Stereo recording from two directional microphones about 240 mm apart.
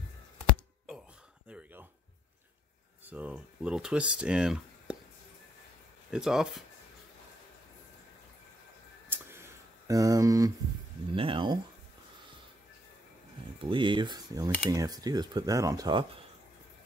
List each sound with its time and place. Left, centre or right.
1.5 s a sound: centre
3.1 s speech: centre
6.1 s speech: centre
9.1 s a sound: centre
11.1 s speech: right
13.6 s speech: right